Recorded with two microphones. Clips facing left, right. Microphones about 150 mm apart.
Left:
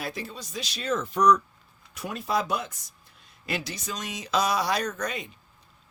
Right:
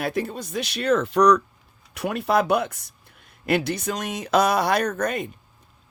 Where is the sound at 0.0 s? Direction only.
55° right (ahead or behind).